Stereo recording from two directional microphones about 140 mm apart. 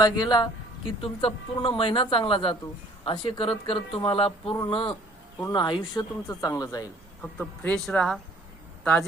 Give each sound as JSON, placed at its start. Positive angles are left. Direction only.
{"t": 0.0, "sound": "speech", "side_deg": 30}
{"t": 7.2, "sound": "speech", "side_deg": 10}